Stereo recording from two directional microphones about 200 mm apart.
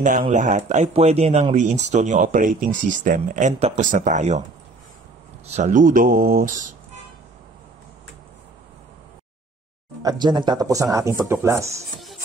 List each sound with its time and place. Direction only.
0.0 s speech: 40° right (ahead or behind)
5.5 s speech: 40° right (ahead or behind)
10.0 s speech: 20° right (ahead or behind)